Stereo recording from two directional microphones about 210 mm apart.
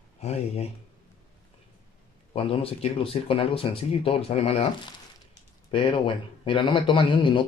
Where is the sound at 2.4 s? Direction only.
25° left (ahead or behind).